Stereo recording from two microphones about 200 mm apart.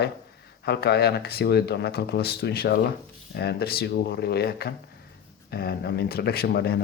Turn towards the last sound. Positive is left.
turn(degrees=50)  # may be behind; listen again after turning